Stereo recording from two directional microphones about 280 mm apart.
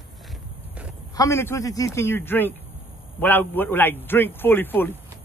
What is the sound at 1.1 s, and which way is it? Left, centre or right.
A man's voice, centre.